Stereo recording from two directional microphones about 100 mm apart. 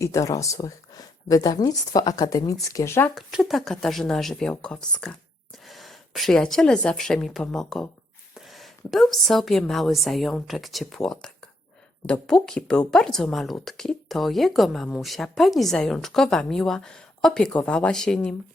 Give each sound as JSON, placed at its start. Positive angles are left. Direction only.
{"t": 0.0, "sound": "speech", "side_deg": 30}
{"t": 3.2, "sound": "a woman's voice", "side_deg": 0}